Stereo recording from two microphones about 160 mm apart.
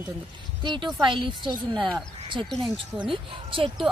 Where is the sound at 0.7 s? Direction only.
25° right (ahead or behind).